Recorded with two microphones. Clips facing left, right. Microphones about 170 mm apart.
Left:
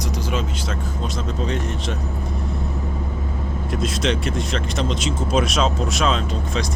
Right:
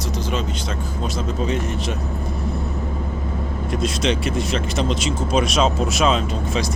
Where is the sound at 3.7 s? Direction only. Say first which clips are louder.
Right 1 dB; centre (ahead or behind).